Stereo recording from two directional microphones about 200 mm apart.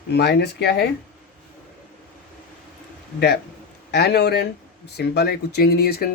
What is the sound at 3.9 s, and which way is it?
Speech, 55° left (ahead or behind).